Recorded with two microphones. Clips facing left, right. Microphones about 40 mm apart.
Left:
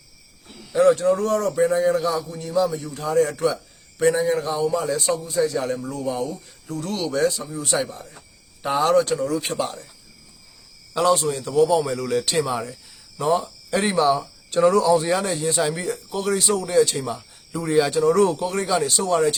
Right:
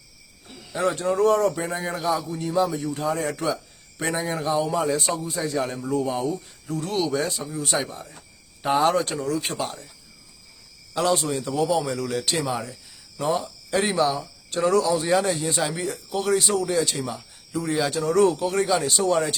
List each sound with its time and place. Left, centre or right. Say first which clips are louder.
0.4 s a man's voice: left 8 dB; centre; by 2.6 s right
2.6 s a man's voice: even; centre
3.3 s a sound: left 4 dB; centre
5.0 s a man's voice: left 5 dB; centre
7.9 s speech: even; right
9.1 s speech: left 3 dB; centre
10.9 s speech: left 3 dB; centre